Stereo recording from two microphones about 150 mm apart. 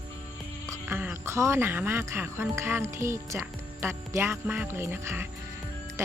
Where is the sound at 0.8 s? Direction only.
15° right (ahead or behind).